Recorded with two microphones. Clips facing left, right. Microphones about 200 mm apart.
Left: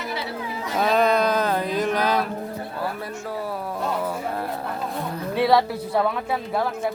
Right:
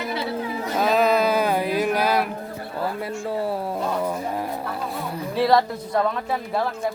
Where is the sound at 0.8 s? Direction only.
Centre (ahead or behind).